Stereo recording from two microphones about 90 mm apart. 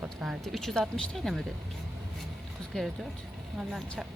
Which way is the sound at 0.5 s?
5° left (ahead or behind).